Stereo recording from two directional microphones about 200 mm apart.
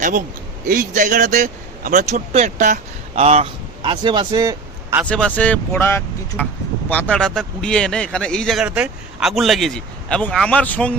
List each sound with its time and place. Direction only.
0.0 s speech: 40° right (ahead or behind); by 5.0 s 15° right (ahead or behind)
5.0 s speech: 5° left (ahead or behind)